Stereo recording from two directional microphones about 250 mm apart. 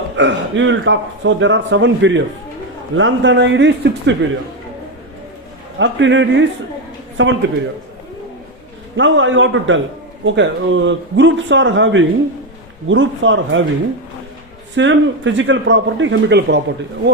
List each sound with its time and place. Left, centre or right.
0.2 s speech: right
5.8 s speech: right
9.0 s speech: right
14.8 s speech: right